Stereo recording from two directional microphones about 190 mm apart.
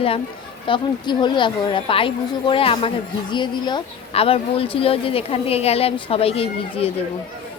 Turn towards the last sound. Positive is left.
turn(degrees=30)  # may be behind; listen again after turning